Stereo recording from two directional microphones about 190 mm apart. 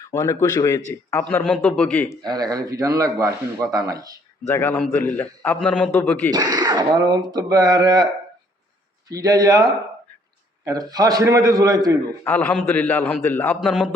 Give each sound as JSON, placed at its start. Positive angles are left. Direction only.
{"t": 0.1, "sound": "a man's voice", "side_deg": 15}
{"t": 2.2, "sound": "speech", "side_deg": -20}
{"t": 4.4, "sound": "a man's voice", "side_deg": 10}
{"t": 6.3, "sound": "speech", "side_deg": -20}
{"t": 9.0, "sound": "speech", "side_deg": -20}
{"t": 12.2, "sound": "a man's voice", "side_deg": 10}